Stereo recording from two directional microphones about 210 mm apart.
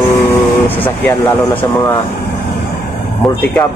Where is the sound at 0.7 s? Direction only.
10° left (ahead or behind).